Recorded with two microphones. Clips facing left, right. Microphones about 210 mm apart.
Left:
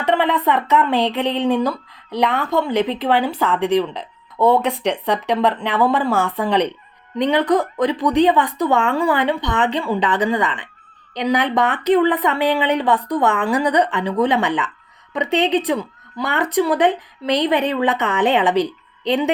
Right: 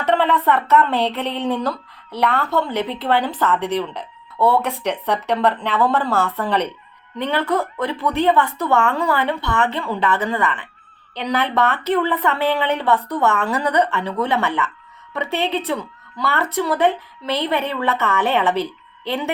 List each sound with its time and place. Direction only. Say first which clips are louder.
0.0 s speech: even; 15° left (ahead or behind)